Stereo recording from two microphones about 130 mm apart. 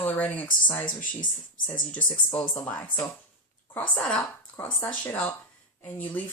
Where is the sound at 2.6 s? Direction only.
10° left (ahead or behind).